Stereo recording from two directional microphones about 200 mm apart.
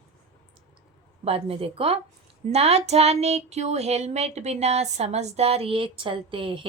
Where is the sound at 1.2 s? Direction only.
30° right (ahead or behind).